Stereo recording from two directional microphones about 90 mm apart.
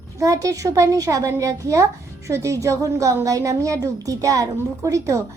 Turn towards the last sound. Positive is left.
turn(degrees=-35)  # may be behind; listen again after turning